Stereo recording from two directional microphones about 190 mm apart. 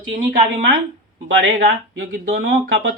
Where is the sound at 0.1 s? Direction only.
50° right (ahead or behind).